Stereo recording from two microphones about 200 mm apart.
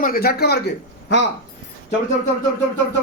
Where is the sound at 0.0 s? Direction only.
50° left (ahead or behind).